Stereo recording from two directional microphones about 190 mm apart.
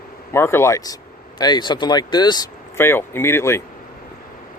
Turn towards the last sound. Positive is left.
turn(degrees=15)  # may be behind; listen again after turning